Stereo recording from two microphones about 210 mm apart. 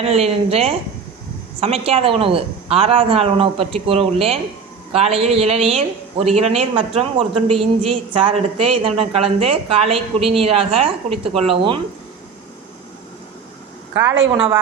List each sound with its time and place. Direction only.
0.0 s a woman's voice: 30° right (ahead or behind)
14.3 s a woman's voice: 5° right (ahead or behind)